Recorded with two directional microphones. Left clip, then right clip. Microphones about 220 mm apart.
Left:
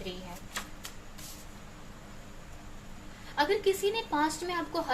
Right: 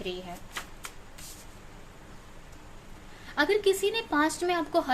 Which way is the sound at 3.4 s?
50° right (ahead or behind).